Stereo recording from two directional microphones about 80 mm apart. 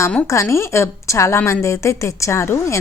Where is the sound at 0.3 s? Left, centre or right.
Left.